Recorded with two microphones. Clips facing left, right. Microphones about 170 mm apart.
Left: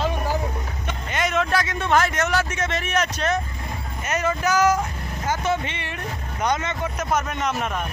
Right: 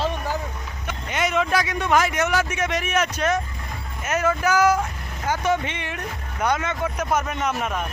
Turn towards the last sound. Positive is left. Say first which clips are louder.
# even
turn(degrees=-5)  # may be behind; listen again after turning